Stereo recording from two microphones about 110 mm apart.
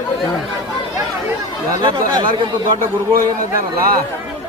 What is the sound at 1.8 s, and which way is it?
Speech, 40° right (ahead or behind).